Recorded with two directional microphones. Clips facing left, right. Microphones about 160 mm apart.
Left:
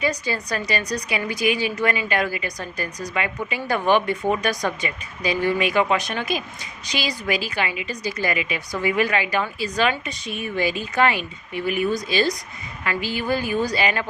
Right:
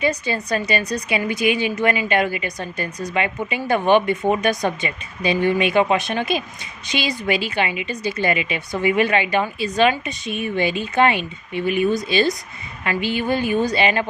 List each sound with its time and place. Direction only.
0.0 s a woman's voice: 25° right (ahead or behind)